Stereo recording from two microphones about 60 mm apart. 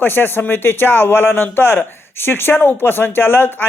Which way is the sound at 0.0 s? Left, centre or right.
Left.